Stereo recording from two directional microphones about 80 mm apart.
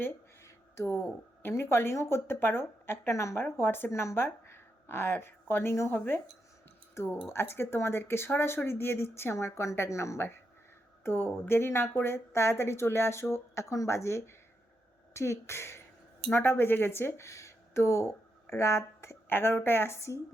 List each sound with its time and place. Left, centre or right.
0.4 s speech: left